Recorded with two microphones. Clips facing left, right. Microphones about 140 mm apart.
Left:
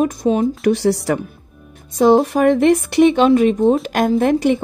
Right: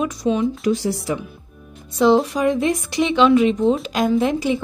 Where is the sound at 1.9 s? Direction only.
50° left (ahead or behind).